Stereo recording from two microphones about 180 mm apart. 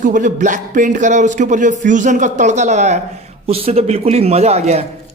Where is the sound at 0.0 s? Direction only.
45° right (ahead or behind).